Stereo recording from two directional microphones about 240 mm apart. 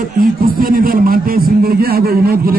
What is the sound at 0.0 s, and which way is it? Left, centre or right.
A man's voice, right.